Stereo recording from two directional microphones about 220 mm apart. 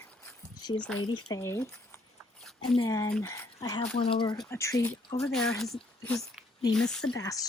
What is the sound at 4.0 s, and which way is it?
Speech, 25° left (ahead or behind).